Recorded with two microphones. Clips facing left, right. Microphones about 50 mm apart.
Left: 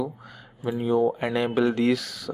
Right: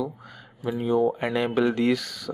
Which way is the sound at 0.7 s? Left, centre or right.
Centre.